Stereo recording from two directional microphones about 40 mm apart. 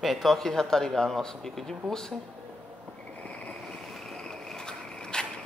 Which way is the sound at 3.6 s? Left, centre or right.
Centre.